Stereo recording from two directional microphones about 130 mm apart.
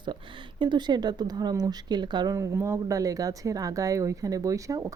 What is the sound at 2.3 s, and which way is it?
Speech, 20° right (ahead or behind).